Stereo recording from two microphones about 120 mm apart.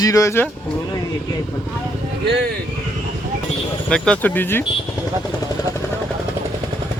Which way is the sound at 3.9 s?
5° left (ahead or behind).